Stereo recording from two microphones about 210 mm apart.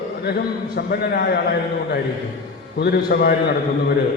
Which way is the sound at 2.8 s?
45° left (ahead or behind).